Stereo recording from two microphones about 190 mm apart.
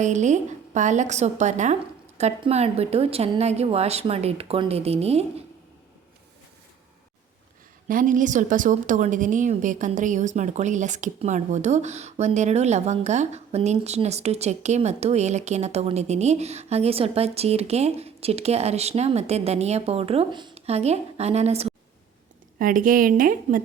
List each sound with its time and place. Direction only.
0.0 s a woman's voice: 40° right (ahead or behind)
7.9 s a woman's voice: 45° right (ahead or behind)
22.5 s a woman's voice: 45° right (ahead or behind)